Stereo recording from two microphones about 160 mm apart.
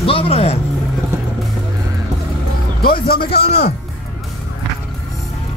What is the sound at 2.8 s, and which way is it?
Music, 70° left (ahead or behind).